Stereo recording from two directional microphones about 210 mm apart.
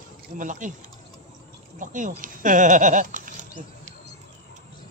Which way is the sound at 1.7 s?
40° right (ahead or behind).